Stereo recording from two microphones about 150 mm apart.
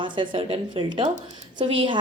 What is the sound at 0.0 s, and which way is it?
A woman's voice, 35° right (ahead or behind).